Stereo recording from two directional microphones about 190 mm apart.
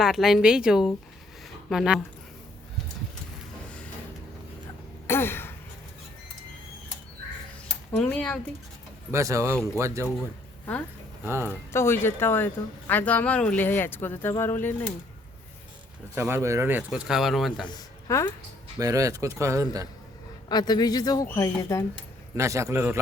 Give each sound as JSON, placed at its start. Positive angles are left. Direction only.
{"t": 0.0, "sound": "a woman's voice", "side_deg": 0}
{"t": 5.0, "sound": "throat clearing", "side_deg": 10}
{"t": 7.9, "sound": "speech", "side_deg": 5}
{"t": 9.1, "sound": "speech", "side_deg": -15}
{"t": 11.3, "sound": "speech", "side_deg": -15}
{"t": 11.7, "sound": "speech", "side_deg": 15}
{"t": 16.1, "sound": "speech", "side_deg": -10}
{"t": 17.6, "sound": "speech", "side_deg": 20}
{"t": 18.8, "sound": "speech", "side_deg": -20}
{"t": 20.5, "sound": "speech", "side_deg": 20}
{"t": 22.4, "sound": "speech", "side_deg": -15}